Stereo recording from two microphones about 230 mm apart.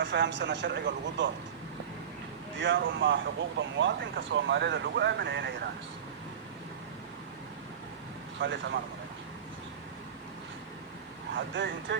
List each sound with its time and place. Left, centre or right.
0.0 s speech: right
2.6 s speech: right
8.4 s speech: right
11.3 s speech: right